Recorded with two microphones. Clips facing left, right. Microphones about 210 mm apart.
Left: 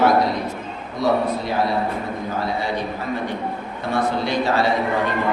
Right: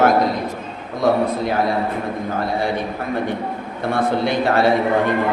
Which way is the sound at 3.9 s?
55° right (ahead or behind).